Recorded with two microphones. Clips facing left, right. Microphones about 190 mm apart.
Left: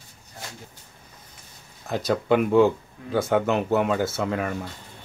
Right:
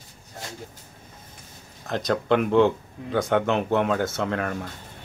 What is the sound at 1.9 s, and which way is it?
Speech, 5° left (ahead or behind).